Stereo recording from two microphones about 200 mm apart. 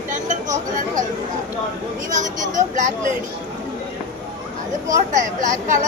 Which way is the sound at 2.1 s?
40° right (ahead or behind).